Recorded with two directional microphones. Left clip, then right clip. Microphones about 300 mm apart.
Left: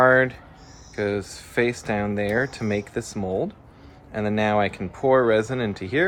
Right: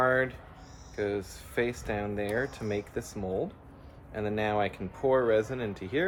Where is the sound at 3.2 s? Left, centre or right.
Left.